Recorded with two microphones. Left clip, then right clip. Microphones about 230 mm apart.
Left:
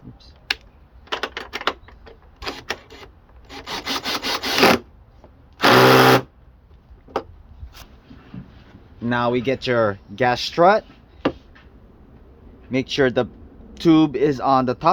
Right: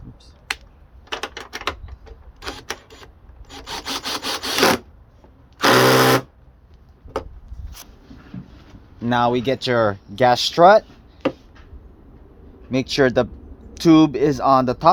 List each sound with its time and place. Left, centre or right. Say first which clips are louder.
1.1 s a sound: left 2 dB; centre
3.5 s rub: left 2 dB; centre
5.5 s sewing machine: left 2 dB; centre
7.7 s a sound: right 2 dB; right
9.0 s speech: right 2 dB; right
12.7 s speech: right 2 dB; right